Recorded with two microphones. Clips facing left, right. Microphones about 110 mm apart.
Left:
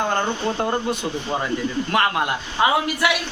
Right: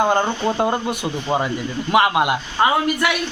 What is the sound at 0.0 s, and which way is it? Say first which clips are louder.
Speech: right 4 dB; 15° right (ahead or behind).